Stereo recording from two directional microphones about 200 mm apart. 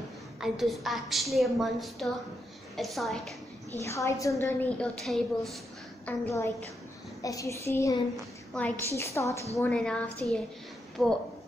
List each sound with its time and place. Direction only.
0.4 s a woman's voice: centre (ahead or behind)
3.8 s a woman's voice: 15° left (ahead or behind)
6.0 s a woman's voice: 15° left (ahead or behind)